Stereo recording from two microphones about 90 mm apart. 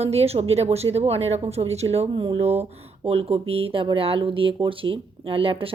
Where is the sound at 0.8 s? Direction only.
55° right (ahead or behind).